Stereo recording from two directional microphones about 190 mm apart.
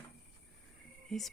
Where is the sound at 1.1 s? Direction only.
5° left (ahead or behind).